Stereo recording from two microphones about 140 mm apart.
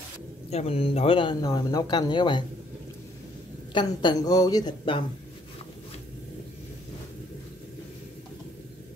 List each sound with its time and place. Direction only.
0.5 s speech: 45° left (ahead or behind)
3.7 s speech: 30° left (ahead or behind)